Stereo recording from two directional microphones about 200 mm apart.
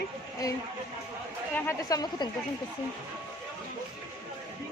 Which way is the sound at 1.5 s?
15° left (ahead or behind).